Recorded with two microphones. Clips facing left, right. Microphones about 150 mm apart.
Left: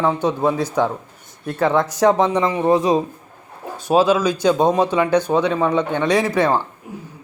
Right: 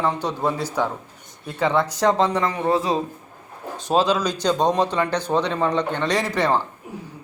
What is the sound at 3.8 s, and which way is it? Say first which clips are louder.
Speech: left 4 dB; 5° left (ahead or behind).